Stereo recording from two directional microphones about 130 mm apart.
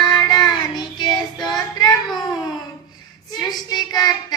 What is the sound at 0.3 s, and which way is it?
Child singing, 35° left (ahead or behind).